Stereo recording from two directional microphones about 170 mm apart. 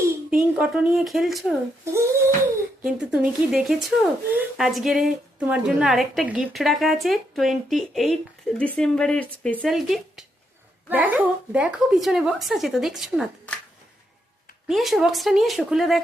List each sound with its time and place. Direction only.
0.3 s speech: 5° right (ahead or behind)
1.8 s speech: 15° right (ahead or behind)
2.8 s speech: 5° right (ahead or behind)
14.7 s speech: centre (ahead or behind)